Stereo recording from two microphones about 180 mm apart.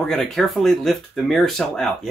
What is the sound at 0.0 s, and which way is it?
Speech, centre (ahead or behind).